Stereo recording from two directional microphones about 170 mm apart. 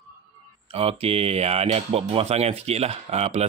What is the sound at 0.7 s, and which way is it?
Speech, 35° right (ahead or behind).